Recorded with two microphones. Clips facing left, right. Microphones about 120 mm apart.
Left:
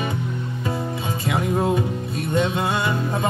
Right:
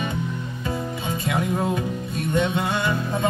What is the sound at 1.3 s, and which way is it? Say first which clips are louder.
Music: left 3 dB; 25° left (ahead or behind).